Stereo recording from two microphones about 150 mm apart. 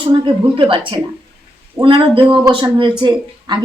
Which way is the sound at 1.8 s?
35° right (ahead or behind).